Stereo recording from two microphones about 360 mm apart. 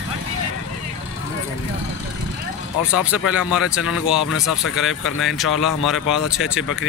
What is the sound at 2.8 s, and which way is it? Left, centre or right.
Speech, centre.